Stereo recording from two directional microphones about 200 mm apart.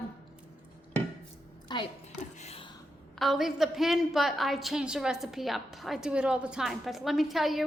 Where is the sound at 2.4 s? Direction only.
30° left (ahead or behind).